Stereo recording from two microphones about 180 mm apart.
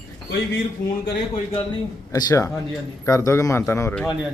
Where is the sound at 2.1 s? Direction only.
20° left (ahead or behind).